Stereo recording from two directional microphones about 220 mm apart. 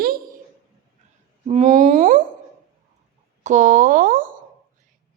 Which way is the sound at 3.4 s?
35° right (ahead or behind).